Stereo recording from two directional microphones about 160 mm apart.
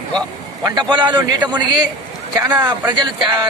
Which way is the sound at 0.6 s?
25° right (ahead or behind).